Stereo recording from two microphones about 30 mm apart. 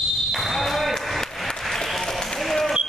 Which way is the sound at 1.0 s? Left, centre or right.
Centre.